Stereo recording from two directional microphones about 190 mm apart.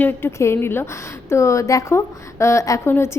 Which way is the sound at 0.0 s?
10° left (ahead or behind).